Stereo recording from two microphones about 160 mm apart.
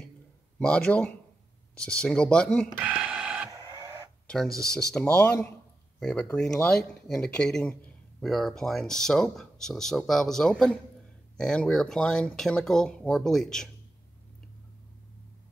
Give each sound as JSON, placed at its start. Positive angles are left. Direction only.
{"t": 0.6, "sound": "a man's voice", "side_deg": 5}
{"t": 2.8, "sound": "alarm clock", "side_deg": -10}
{"t": 3.4, "sound": "printer", "side_deg": -20}
{"t": 4.6, "sound": "a man's voice", "side_deg": 5}